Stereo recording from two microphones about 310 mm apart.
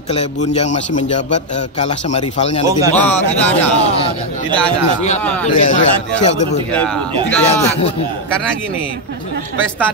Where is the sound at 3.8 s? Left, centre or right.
Centre.